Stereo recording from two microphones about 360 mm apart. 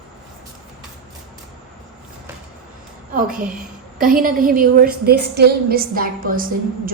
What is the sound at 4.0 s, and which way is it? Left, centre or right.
A woman's voice, right.